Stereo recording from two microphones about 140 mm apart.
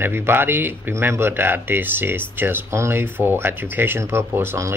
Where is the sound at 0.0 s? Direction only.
15° right (ahead or behind).